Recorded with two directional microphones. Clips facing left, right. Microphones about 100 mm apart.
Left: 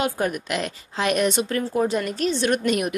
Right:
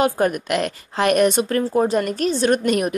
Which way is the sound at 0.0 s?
50° right (ahead or behind).